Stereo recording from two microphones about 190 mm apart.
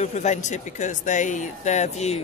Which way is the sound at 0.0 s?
40° left (ahead or behind).